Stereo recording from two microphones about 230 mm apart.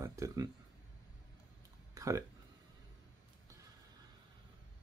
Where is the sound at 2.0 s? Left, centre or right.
Centre.